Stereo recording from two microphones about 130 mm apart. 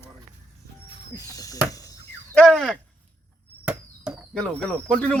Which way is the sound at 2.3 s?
5° left (ahead or behind).